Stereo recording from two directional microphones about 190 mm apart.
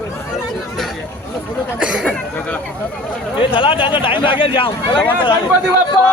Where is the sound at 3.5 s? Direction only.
25° left (ahead or behind).